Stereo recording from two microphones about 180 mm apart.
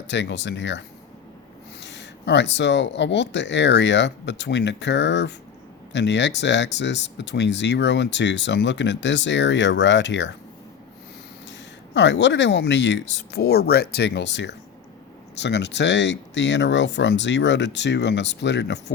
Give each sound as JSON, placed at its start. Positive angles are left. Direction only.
{"t": 0.1, "sound": "speech", "side_deg": 75}
{"t": 11.9, "sound": "speech", "side_deg": 80}